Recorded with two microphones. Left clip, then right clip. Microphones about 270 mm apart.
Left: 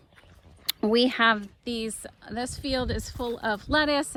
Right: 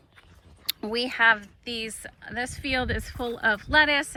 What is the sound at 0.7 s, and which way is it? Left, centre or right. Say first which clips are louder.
Speech: left 5 dB; left.